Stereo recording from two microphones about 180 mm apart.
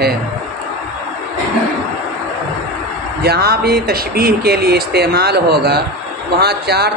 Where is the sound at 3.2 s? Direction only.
60° right (ahead or behind).